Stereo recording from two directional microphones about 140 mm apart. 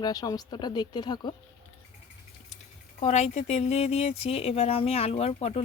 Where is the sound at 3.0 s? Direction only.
55° left (ahead or behind).